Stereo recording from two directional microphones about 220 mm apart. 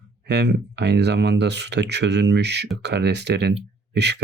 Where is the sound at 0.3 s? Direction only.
50° right (ahead or behind).